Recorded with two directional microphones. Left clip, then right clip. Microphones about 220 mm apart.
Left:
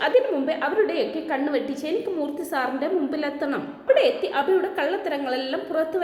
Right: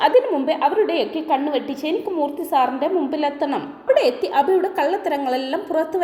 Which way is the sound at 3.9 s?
30° right (ahead or behind).